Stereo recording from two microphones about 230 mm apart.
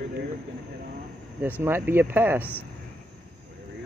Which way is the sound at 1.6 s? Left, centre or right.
Centre.